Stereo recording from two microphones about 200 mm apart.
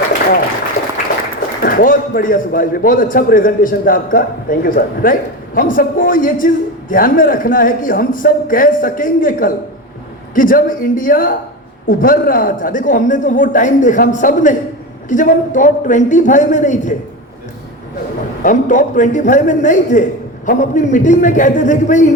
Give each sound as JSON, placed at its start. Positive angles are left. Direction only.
{"t": 1.6, "sound": "a man's voice", "side_deg": 45}
{"t": 18.4, "sound": "speech", "side_deg": 40}